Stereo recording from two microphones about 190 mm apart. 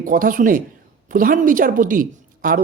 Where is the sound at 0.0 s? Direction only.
45° right (ahead or behind).